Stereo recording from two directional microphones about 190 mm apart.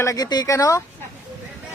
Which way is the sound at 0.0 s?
20° left (ahead or behind).